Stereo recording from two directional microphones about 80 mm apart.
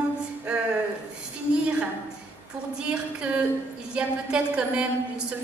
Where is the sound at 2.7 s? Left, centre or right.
Centre.